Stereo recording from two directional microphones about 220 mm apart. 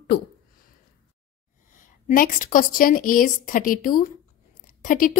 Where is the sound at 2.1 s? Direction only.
40° left (ahead or behind).